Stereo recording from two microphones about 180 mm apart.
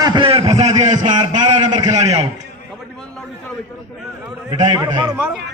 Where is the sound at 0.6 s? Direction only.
40° right (ahead or behind).